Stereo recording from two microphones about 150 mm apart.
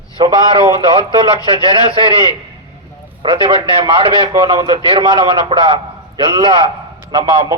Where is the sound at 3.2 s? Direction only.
35° right (ahead or behind).